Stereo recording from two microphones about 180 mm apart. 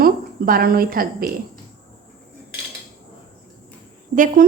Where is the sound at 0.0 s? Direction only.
55° right (ahead or behind).